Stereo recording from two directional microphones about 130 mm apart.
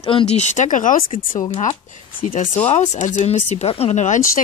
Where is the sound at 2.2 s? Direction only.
75° left (ahead or behind).